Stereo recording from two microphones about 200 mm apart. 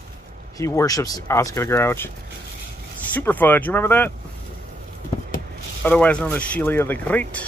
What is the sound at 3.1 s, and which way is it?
Speech, 10° left (ahead or behind).